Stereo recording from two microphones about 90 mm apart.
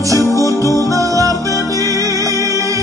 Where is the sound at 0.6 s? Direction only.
35° right (ahead or behind).